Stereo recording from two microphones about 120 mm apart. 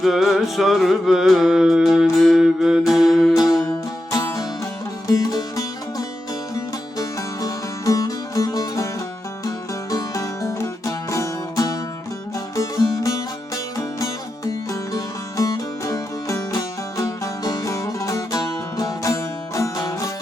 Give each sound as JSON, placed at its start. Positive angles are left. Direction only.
{"t": 0.0, "sound": "music", "side_deg": 0}
{"t": 4.1, "sound": "music", "side_deg": 30}
{"t": 9.9, "sound": "music", "side_deg": 25}